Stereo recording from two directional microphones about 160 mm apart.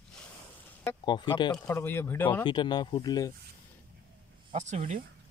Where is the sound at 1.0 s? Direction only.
30° left (ahead or behind).